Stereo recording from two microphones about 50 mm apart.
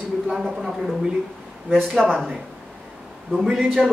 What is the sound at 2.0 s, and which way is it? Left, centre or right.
Speech, right.